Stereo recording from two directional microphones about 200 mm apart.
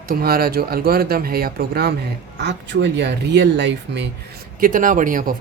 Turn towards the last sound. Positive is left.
turn(degrees=-45)  # may be behind; listen again after turning